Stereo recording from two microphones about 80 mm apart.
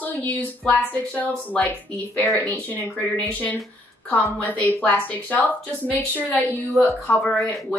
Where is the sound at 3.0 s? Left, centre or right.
Centre.